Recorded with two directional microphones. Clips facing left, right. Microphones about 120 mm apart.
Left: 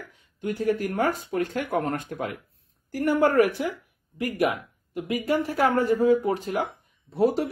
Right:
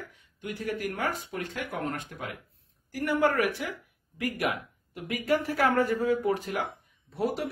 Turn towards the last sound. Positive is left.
turn(degrees=35)  # may be behind; listen again after turning